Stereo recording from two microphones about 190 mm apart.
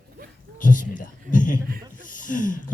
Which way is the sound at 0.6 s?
45° left (ahead or behind).